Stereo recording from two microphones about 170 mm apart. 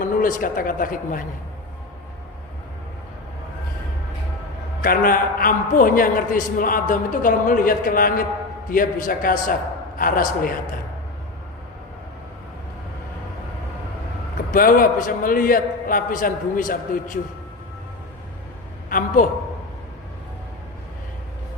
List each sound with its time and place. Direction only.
0.0 s speech: 50° left (ahead or behind)
4.8 s a man's voice: 55° left (ahead or behind)
14.5 s a man's voice: 55° left (ahead or behind)
18.9 s a man's voice: 50° left (ahead or behind)